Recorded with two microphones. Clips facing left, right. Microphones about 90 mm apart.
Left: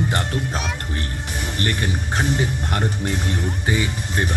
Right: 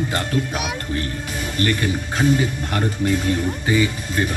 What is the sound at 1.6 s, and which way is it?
Speech, 30° left (ahead or behind).